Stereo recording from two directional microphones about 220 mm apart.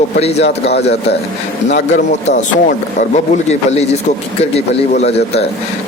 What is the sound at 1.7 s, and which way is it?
A man's voice, 35° left (ahead or behind).